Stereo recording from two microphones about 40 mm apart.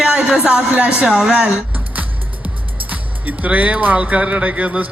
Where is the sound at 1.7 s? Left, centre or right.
Right.